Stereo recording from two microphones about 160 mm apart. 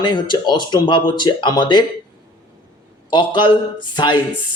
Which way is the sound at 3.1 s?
30° left (ahead or behind).